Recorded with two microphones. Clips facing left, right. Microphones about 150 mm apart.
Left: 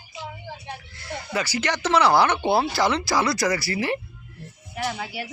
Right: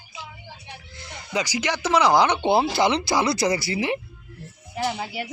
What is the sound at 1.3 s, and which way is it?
Speech, 15° right (ahead or behind).